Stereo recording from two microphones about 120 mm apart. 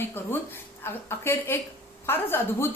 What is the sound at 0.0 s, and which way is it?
A woman's voice, 20° left (ahead or behind).